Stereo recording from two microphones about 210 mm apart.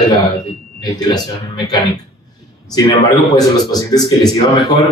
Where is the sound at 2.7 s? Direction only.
15° left (ahead or behind).